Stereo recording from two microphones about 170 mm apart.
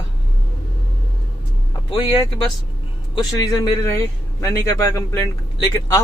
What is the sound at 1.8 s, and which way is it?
Speech, 30° left (ahead or behind).